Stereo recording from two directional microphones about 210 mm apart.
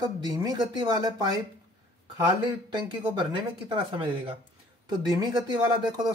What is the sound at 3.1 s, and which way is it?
Speech, 20° right (ahead or behind).